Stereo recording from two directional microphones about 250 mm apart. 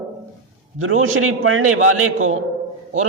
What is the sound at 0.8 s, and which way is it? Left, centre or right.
A man's voice, right.